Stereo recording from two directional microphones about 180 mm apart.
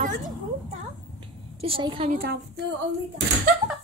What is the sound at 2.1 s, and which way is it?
Speech, 60° right (ahead or behind).